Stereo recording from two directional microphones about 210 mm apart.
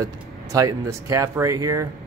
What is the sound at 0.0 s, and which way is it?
Speech, 15° right (ahead or behind).